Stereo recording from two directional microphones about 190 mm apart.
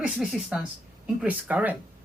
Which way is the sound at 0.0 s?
5° right (ahead or behind).